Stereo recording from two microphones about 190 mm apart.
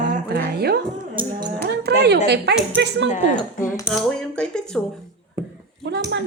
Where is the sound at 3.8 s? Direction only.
5° left (ahead or behind).